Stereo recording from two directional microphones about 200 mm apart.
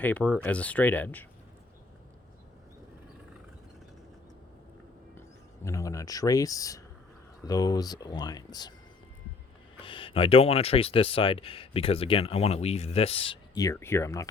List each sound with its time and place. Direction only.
0.0 s speech: 10° left (ahead or behind)
5.6 s speech: 15° left (ahead or behind)
9.8 s speech: 25° left (ahead or behind)